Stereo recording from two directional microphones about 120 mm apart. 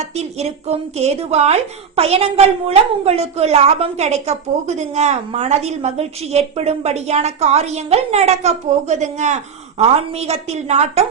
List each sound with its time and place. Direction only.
0.0 s a woman's voice: 65° right (ahead or behind)